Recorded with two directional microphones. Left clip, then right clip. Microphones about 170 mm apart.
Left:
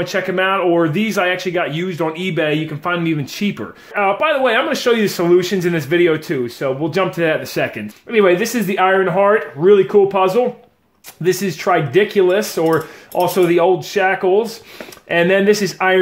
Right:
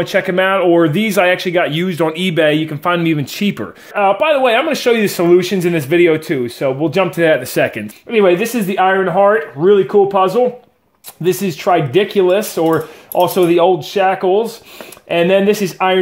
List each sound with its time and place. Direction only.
0.0 s speech: 40° right (ahead or behind)
8.2 s speech: 30° right (ahead or behind)